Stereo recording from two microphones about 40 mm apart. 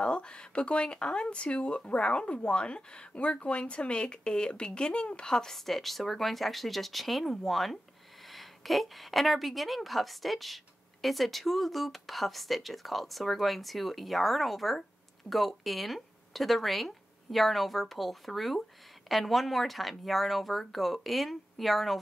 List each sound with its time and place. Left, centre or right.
0.0 s speech: left
5.3 s speech: centre